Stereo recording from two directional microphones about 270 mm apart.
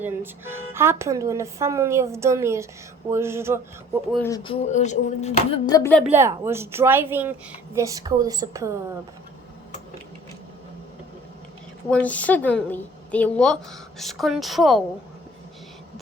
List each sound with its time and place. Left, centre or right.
0.0 s speech: centre
4.1 s speech: centre
4.4 s speech: left; by 6.1 s centre
6.1 s speech: centre
11.9 s a woman's voice: centre